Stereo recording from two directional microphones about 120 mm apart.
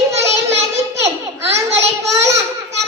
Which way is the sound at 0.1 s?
25° right (ahead or behind).